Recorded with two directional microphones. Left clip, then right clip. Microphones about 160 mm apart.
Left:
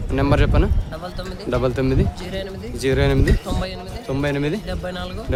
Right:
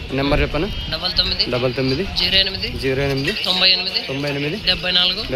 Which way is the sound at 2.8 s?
20° left (ahead or behind).